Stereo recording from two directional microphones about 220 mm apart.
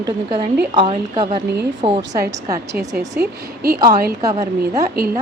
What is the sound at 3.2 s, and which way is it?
Speech, 45° right (ahead or behind).